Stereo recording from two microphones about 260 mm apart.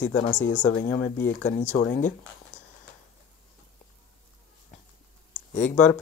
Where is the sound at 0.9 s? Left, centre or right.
Left.